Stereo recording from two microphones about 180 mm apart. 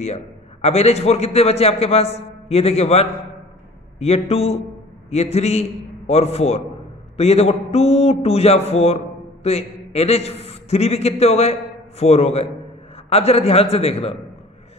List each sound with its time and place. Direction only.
0.0 s a man's voice: 35° left (ahead or behind)